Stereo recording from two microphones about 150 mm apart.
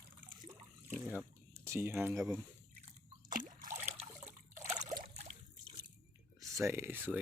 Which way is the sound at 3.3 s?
60° right (ahead or behind).